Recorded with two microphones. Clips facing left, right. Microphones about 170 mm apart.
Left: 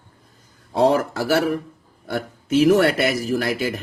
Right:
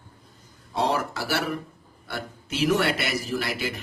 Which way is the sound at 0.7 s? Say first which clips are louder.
Left 8 dB; 50° left (ahead or behind).